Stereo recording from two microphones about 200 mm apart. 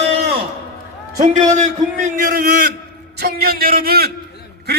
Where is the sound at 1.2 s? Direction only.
35° right (ahead or behind).